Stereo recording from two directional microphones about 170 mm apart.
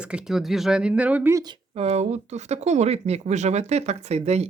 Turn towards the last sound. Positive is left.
turn(degrees=-40)  # may be behind; listen again after turning